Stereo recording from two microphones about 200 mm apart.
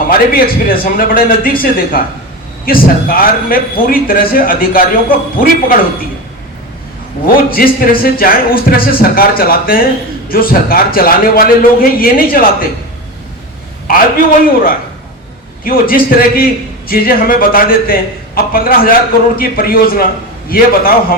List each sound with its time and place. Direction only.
0.1 s speech: 45° left (ahead or behind)
7.3 s speech: 45° left (ahead or behind)
14.4 s speech: 45° left (ahead or behind)